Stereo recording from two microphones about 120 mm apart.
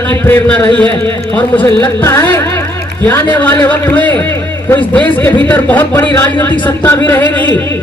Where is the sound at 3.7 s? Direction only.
15° left (ahead or behind).